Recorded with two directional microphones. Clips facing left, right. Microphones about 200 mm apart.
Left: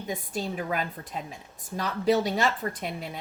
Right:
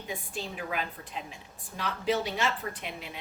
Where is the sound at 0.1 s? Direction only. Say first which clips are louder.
Left 6 dB; 40° left (ahead or behind).